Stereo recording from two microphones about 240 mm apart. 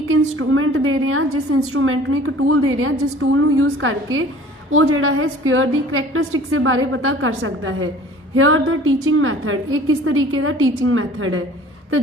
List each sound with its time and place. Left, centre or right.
0.1 s a woman's voice: right